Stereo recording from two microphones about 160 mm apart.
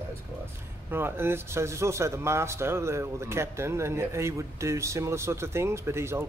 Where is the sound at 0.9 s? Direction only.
15° right (ahead or behind).